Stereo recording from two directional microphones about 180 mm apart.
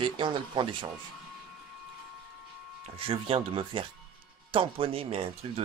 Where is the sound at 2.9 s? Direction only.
30° right (ahead or behind).